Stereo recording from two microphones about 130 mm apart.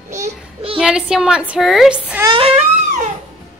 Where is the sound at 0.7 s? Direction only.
5° right (ahead or behind).